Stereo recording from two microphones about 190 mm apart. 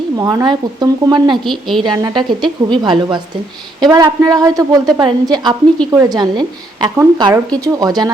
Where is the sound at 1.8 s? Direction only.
20° right (ahead or behind).